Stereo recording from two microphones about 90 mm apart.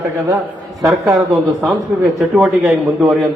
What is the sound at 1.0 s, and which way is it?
Speech, 35° right (ahead or behind).